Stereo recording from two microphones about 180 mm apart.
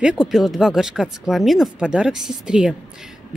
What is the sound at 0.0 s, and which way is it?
Speech, 5° right (ahead or behind).